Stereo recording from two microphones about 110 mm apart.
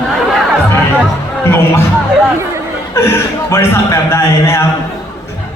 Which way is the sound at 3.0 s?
25° left (ahead or behind).